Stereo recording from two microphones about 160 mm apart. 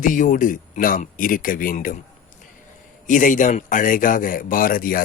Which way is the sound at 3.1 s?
55° left (ahead or behind).